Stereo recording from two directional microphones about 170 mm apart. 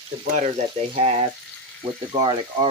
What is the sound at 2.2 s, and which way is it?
Speech, 25° right (ahead or behind).